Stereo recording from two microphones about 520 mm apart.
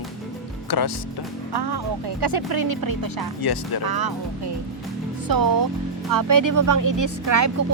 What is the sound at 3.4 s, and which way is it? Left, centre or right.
Speech, left.